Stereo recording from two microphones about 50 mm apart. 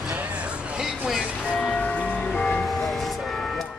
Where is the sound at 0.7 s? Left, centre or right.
Centre.